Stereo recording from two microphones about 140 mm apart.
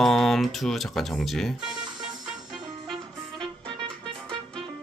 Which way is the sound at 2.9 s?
35° right (ahead or behind).